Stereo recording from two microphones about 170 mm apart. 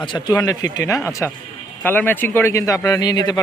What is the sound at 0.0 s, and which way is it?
A man's voice, 30° left (ahead or behind).